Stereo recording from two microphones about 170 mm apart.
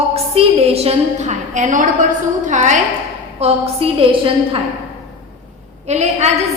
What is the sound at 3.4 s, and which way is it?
A woman's voice, 35° right (ahead or behind).